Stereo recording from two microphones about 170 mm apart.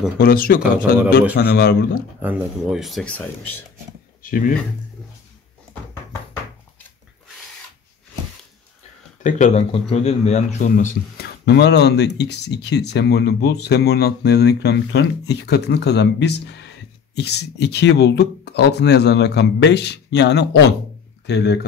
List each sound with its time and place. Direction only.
0.2 s speech: 60° left (ahead or behind)
0.6 s a man's voice: 10° right (ahead or behind)
1.3 s a man's voice: 70° left (ahead or behind)
2.2 s speech: 5° right (ahead or behind)
4.2 s speech: 55° left (ahead or behind)
9.2 s a man's voice: 40° left (ahead or behind)
11.1 s speech: 75° left (ahead or behind)